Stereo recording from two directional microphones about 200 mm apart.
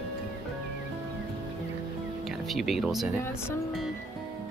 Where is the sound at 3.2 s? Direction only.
10° left (ahead or behind).